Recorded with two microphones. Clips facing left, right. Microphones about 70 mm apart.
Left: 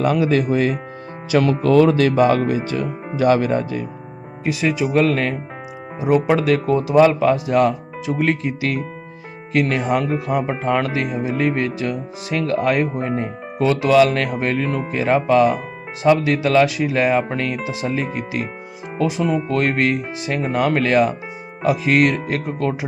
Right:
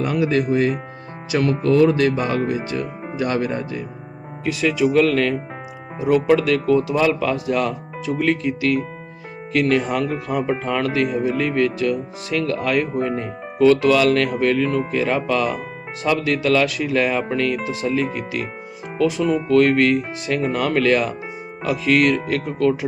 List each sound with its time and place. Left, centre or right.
0.0 s speech: left
4.4 s speech: centre
17.6 s speech: centre
17.9 s speech: left
19.0 s speech: centre
19.5 s speech: left
20.0 s speech: centre
20.3 s speech: centre